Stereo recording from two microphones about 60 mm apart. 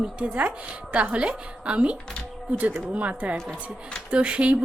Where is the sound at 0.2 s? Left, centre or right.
Right.